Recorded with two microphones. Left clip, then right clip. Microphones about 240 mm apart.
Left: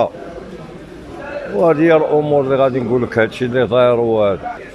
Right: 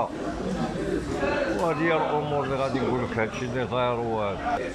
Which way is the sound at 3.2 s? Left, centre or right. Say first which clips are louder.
Left 13 dB; left.